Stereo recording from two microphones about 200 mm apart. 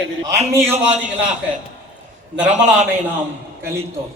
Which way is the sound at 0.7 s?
35° right (ahead or behind).